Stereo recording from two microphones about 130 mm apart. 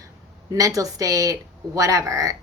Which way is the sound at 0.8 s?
25° right (ahead or behind).